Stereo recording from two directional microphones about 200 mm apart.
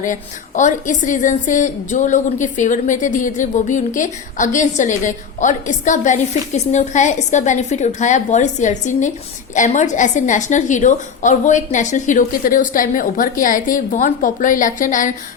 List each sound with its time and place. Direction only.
0.0 s a woman's voice: 40° left (ahead or behind)